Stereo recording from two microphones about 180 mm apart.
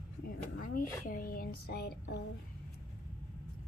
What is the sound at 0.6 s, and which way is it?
A woman's voice, 50° left (ahead or behind).